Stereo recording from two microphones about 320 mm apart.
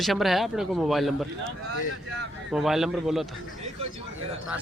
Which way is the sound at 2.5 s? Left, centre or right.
Centre.